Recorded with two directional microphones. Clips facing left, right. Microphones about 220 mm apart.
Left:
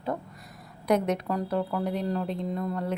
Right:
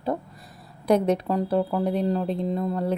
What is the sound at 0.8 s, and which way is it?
Speech, 30° right (ahead or behind).